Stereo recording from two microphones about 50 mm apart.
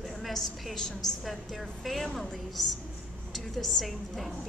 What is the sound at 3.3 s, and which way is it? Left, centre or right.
A woman's voice, centre.